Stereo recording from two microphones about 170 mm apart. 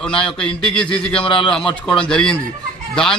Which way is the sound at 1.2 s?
30° left (ahead or behind).